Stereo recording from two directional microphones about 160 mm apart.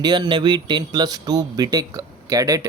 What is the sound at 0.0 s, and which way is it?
A man's voice, 25° right (ahead or behind).